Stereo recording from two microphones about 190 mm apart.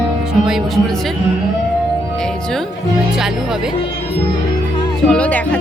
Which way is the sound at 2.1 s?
5° left (ahead or behind).